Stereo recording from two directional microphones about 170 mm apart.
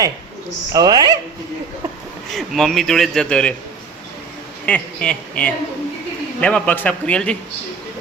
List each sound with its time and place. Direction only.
0.7 s speech: 25° right (ahead or behind)
2.3 s speech: centre (ahead or behind)
4.6 s a woman's voice: 5° left (ahead or behind)